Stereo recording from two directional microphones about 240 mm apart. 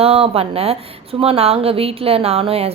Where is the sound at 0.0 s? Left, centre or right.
Right.